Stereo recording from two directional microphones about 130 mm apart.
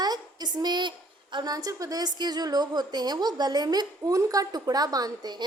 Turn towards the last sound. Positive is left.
turn(degrees=-30)  # may be behind; listen again after turning